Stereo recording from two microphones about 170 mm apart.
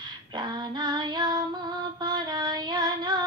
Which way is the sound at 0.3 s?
25° right (ahead or behind).